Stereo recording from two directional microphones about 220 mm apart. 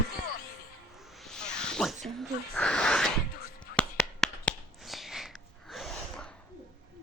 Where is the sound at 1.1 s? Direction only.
Centre (ahead or behind).